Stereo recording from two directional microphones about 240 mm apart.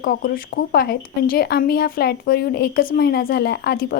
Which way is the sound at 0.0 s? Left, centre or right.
Left.